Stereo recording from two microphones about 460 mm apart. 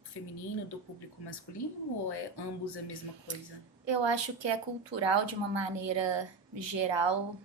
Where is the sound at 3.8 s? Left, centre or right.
Right.